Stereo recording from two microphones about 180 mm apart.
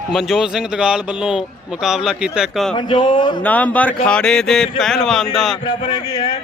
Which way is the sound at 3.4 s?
10° left (ahead or behind).